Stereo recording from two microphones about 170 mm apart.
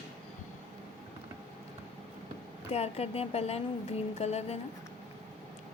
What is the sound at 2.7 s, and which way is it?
Speech, 35° left (ahead or behind).